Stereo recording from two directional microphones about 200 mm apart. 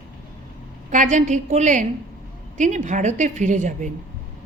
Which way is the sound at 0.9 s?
40° right (ahead or behind).